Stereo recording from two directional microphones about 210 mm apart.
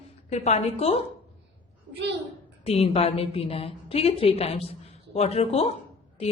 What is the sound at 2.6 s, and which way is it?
A man's voice, 30° left (ahead or behind).